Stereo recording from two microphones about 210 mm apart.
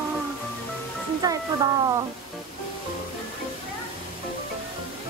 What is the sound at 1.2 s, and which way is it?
Music, 15° right (ahead or behind).